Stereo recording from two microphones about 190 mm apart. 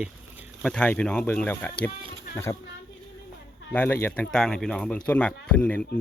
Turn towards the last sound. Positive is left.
turn(degrees=10)  # may be behind; listen again after turning